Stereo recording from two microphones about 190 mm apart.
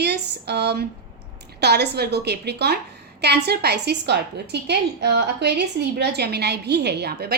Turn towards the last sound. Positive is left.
turn(degrees=-55)  # may be behind; listen again after turning